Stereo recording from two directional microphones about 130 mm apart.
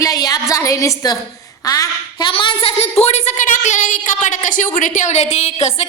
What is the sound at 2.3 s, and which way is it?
Speech, 40° left (ahead or behind).